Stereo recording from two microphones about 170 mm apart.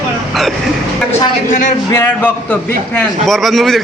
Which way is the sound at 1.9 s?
10° left (ahead or behind).